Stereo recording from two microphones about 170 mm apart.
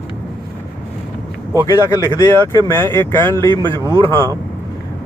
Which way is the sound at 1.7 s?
15° left (ahead or behind).